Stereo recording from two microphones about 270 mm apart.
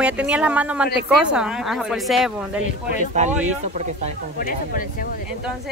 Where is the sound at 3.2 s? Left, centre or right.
Right.